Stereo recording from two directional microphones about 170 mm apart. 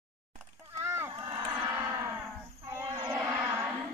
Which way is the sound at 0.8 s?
15° right (ahead or behind).